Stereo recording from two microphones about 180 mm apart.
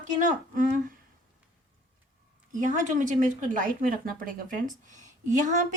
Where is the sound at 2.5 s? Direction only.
45° right (ahead or behind).